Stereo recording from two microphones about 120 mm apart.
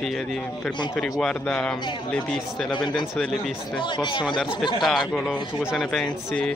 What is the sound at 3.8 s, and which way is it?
Speech, 40° left (ahead or behind).